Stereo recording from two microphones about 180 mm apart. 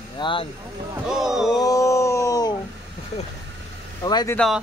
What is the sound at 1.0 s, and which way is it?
Speech, centre (ahead or behind).